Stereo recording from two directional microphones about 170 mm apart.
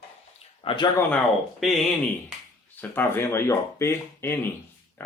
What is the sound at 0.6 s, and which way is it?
Speech, 25° left (ahead or behind).